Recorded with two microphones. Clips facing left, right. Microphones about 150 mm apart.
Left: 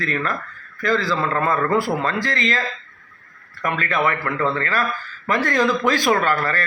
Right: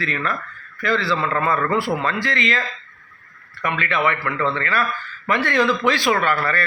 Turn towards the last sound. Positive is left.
turn(degrees=40)  # may be behind; listen again after turning